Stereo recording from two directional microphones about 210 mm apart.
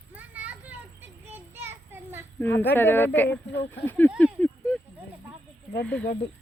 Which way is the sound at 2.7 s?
10° left (ahead or behind).